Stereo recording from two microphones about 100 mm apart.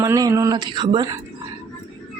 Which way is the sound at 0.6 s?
50° right (ahead or behind).